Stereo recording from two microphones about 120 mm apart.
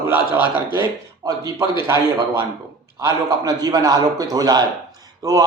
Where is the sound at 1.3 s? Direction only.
30° right (ahead or behind).